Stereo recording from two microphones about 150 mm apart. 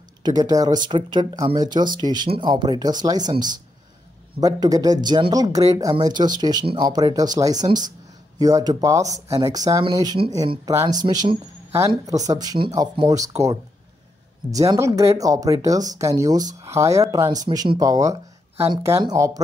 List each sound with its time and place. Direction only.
0.2 s speech: 25° right (ahead or behind)
4.4 s speech: 25° right (ahead or behind)